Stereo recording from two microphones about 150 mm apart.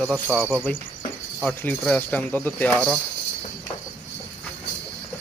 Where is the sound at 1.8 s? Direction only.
10° left (ahead or behind).